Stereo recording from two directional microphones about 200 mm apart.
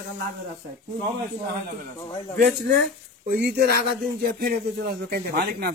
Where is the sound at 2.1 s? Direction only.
25° left (ahead or behind).